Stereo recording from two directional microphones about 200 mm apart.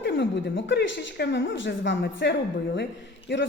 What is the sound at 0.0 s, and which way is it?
Speech, 60° left (ahead or behind).